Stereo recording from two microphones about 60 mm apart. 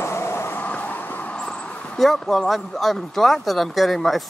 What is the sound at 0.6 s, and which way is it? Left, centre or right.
Vehicle, left.